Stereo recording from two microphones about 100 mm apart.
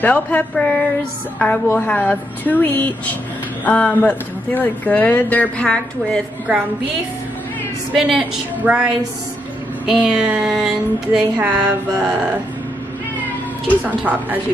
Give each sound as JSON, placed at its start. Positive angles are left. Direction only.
{"t": 0.0, "sound": "speech", "side_deg": 15}
{"t": 7.9, "sound": "a woman's voice", "side_deg": -5}
{"t": 10.4, "sound": "a sound", "side_deg": -5}
{"t": 11.1, "sound": "a woman's voice", "side_deg": -10}
{"t": 13.7, "sound": "a woman's voice", "side_deg": -15}